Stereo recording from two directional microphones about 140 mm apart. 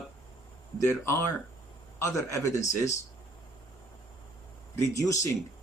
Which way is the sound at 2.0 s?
20° left (ahead or behind).